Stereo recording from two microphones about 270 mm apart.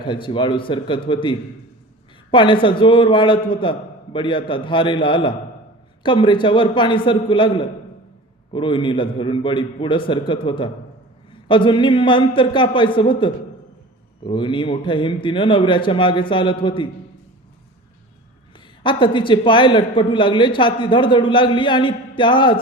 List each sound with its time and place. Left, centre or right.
0.0 s a man's voice: centre
18.8 s a man's voice: centre